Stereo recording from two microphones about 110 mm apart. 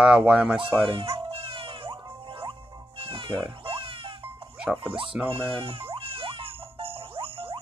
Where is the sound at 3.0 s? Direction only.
55° right (ahead or behind).